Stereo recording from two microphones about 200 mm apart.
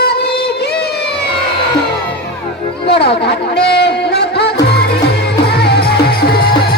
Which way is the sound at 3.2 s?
55° left (ahead or behind).